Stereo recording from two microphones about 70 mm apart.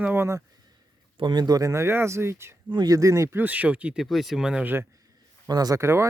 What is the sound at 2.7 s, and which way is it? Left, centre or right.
Speech, right.